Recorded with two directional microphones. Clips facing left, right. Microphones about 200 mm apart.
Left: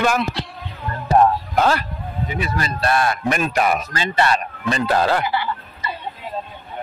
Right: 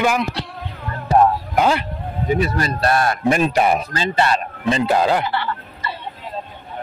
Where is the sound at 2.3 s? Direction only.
40° right (ahead or behind).